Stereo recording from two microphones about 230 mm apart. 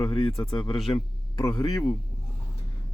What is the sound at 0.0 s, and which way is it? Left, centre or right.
Speech, left.